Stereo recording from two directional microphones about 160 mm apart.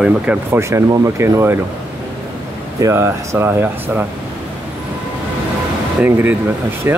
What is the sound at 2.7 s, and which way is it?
Speech, 20° right (ahead or behind).